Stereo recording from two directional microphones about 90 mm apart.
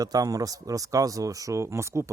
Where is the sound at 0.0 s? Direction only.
40° right (ahead or behind).